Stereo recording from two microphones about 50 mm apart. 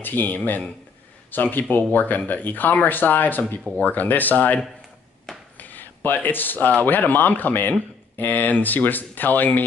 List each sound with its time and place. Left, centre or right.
0.0 s speech: left
5.6 s a sound: left
6.8 s speech: left